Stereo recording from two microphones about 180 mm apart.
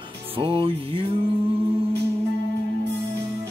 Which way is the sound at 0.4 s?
30° right (ahead or behind).